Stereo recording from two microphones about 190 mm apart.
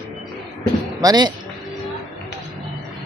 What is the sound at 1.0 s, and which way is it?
Speech, 20° right (ahead or behind).